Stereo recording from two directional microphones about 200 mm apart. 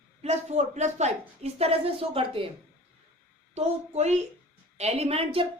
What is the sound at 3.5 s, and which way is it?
A woman's voice, 35° right (ahead or behind).